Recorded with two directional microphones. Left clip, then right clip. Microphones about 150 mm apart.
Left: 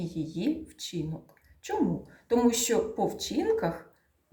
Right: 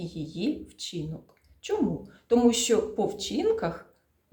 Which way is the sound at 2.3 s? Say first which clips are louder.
Right 3 dB; 20° right (ahead or behind).